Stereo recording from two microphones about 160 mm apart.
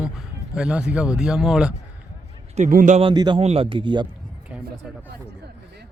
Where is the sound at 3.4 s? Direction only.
40° right (ahead or behind).